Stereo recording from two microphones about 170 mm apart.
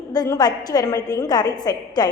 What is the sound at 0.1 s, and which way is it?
Speech, 20° left (ahead or behind).